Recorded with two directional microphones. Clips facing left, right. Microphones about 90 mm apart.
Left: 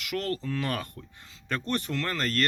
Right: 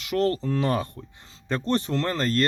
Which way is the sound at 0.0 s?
30° right (ahead or behind).